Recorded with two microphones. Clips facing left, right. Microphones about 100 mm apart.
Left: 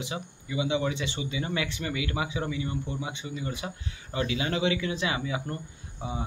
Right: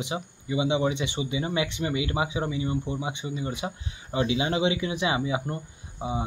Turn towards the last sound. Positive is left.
turn(degrees=-20)  # may be behind; listen again after turning